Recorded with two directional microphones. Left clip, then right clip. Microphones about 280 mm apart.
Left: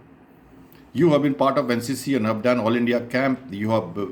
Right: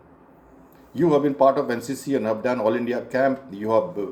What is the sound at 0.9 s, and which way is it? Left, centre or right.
A man's voice, left.